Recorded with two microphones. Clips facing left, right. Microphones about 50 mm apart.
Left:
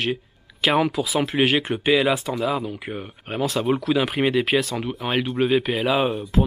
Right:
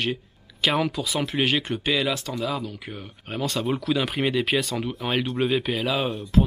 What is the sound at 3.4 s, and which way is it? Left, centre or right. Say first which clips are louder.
Speech: left 4 dB; centre.